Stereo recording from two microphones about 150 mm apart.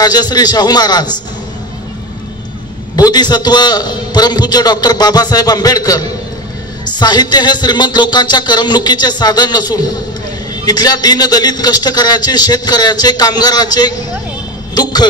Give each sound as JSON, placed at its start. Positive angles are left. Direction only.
{"t": 0.0, "sound": "a man's voice", "side_deg": 25}
{"t": 3.0, "sound": "a man's voice", "side_deg": 25}